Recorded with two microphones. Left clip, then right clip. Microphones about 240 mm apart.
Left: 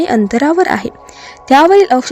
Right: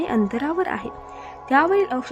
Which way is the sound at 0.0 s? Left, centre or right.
Left.